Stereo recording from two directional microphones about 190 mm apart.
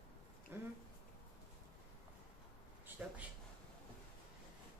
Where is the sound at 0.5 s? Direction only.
10° right (ahead or behind).